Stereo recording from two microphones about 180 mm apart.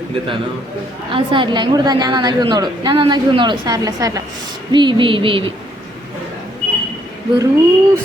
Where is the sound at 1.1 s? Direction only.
25° right (ahead or behind).